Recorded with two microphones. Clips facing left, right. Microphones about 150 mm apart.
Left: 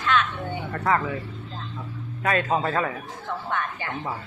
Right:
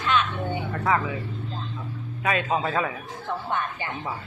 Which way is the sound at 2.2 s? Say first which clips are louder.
Left 1 dB; 10° right (ahead or behind).